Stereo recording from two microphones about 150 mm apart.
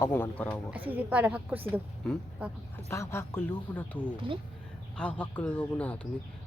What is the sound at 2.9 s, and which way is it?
Speech, 15° left (ahead or behind).